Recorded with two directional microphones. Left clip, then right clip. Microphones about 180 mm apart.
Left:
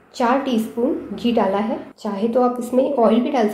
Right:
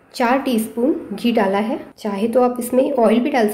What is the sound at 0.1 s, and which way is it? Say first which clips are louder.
A woman's voice: right 1 dB; 30° right (ahead or behind).